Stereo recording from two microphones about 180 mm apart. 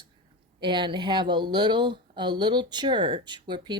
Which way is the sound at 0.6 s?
25° right (ahead or behind).